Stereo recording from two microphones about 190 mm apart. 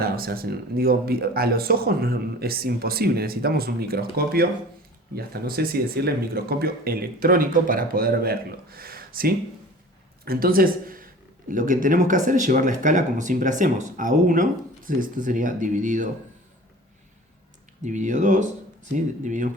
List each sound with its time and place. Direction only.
0.0 s a man's voice: 50° right (ahead or behind)
17.8 s speech: 40° right (ahead or behind)